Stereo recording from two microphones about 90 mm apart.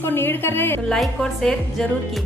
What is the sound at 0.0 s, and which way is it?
Speech, 25° left (ahead or behind).